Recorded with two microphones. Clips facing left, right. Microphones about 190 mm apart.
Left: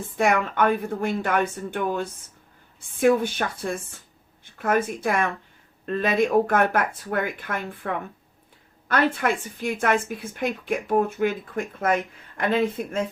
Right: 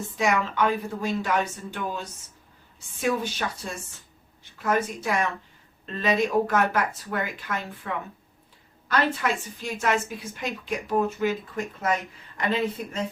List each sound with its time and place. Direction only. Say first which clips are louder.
0.2 s a woman's voice: left 3 dB; 55° left (ahead or behind)